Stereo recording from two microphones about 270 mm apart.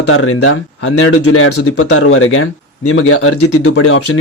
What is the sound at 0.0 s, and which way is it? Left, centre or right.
Speech, left.